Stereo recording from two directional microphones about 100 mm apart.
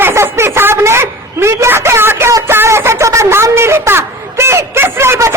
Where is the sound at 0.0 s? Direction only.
25° right (ahead or behind).